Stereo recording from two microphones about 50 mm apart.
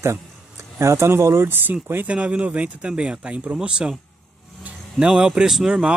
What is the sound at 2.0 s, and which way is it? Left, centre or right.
Speech, right.